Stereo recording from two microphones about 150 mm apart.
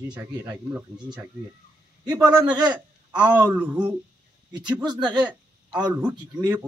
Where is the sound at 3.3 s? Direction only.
20° right (ahead or behind).